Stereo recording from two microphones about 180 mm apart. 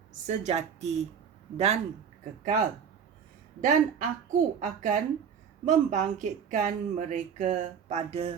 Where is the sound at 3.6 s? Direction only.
45° right (ahead or behind).